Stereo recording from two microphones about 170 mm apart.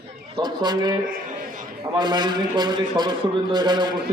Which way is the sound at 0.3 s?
25° right (ahead or behind).